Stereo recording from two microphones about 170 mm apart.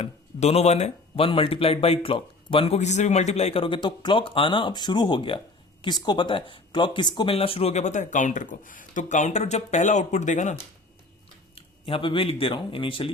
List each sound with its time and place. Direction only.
0.0 s speech: 40° left (ahead or behind)
11.5 s speech: 30° left (ahead or behind)